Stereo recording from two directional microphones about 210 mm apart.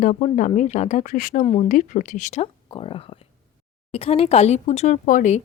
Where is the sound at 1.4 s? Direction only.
30° left (ahead or behind).